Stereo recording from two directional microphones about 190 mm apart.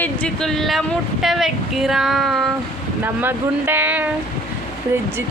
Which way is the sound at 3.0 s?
10° right (ahead or behind).